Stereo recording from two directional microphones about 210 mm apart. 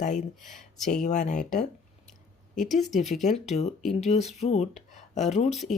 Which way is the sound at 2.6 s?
Centre (ahead or behind).